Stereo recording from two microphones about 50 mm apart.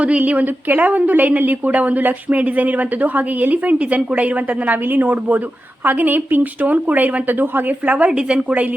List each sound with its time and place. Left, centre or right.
0.0 s a woman's voice: right